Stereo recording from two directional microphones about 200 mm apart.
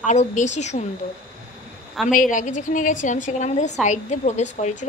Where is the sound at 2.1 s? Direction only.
40° left (ahead or behind).